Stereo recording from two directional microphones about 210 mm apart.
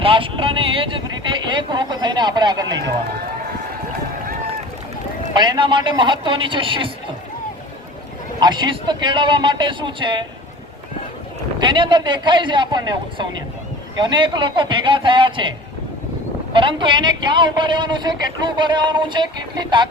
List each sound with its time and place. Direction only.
0.0 s speech: 25° right (ahead or behind)
5.3 s a man's voice: 20° right (ahead or behind)
8.4 s a man's voice: 20° right (ahead or behind)
11.6 s a man's voice: 20° right (ahead or behind)
16.5 s a man's voice: 25° right (ahead or behind)